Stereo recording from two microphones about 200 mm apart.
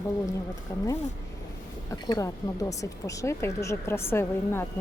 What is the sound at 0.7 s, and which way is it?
Speech, 15° left (ahead or behind).